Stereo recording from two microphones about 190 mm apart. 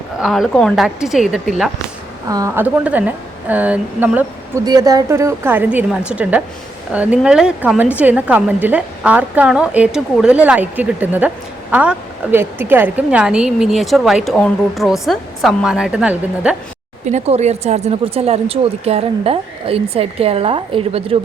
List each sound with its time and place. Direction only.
0.2 s a woman's voice: centre (ahead or behind)
2.2 s a woman's voice: 15° right (ahead or behind)
4.6 s a woman's voice: 20° right (ahead or behind)
17.1 s speech: 35° right (ahead or behind)